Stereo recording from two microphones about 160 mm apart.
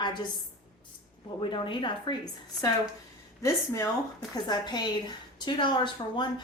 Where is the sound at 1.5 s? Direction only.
30° left (ahead or behind).